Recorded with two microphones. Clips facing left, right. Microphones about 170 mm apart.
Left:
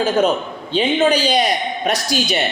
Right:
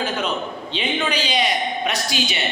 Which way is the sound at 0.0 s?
45° left (ahead or behind).